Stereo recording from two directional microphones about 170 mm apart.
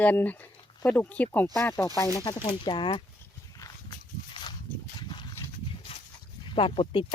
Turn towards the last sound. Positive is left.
turn(degrees=30)  # may be behind; listen again after turning